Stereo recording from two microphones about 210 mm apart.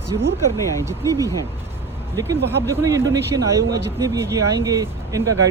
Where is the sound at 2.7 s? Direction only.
15° right (ahead or behind).